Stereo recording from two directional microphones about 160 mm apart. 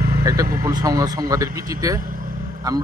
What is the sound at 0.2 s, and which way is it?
Speech, 20° right (ahead or behind).